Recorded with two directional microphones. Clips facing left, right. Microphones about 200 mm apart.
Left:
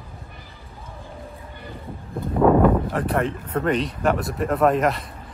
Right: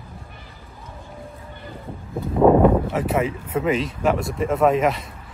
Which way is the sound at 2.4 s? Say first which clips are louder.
Right 2 dB; 15° right (ahead or behind).